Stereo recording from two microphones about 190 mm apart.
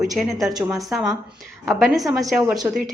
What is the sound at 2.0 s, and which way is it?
Speech, 20° right (ahead or behind).